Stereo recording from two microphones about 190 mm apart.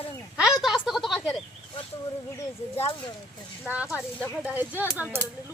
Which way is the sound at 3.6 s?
5° right (ahead or behind).